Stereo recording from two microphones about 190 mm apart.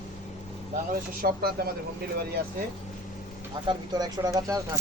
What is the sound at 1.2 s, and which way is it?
Speech, 55° right (ahead or behind).